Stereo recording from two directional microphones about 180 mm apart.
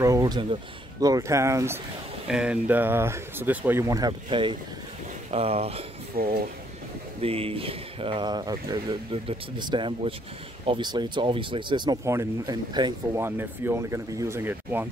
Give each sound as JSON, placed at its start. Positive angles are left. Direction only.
{"t": 0.0, "sound": "speech", "side_deg": -20}
{"t": 2.2, "sound": "speech", "side_deg": -5}
{"t": 6.1, "sound": "speech", "side_deg": -50}
{"t": 7.2, "sound": "speech", "side_deg": -30}